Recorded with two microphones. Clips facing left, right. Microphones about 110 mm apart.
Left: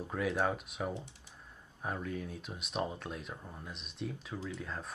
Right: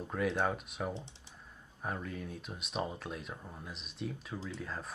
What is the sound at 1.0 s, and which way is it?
Speech, 30° right (ahead or behind).